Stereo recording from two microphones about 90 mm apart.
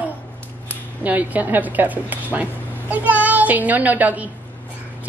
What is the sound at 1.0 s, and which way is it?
A woman's voice, 20° right (ahead or behind).